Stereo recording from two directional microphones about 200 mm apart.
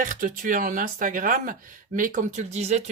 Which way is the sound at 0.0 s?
40° right (ahead or behind).